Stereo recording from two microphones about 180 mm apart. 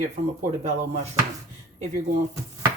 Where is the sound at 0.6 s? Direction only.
35° right (ahead or behind).